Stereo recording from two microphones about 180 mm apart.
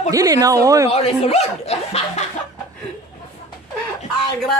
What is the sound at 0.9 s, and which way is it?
Speech, 35° left (ahead or behind).